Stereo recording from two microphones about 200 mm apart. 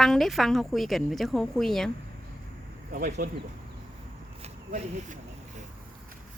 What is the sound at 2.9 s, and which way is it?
Speech, 40° right (ahead or behind).